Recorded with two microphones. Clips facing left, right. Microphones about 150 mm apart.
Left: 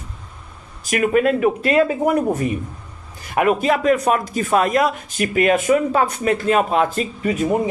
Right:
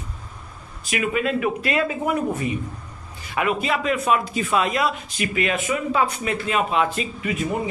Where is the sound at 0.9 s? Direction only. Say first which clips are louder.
Left 6 dB; 45° left (ahead or behind).